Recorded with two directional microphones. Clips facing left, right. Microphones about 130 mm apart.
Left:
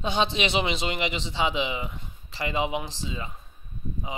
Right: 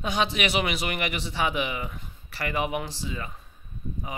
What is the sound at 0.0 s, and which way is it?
A man's voice, 25° left (ahead or behind).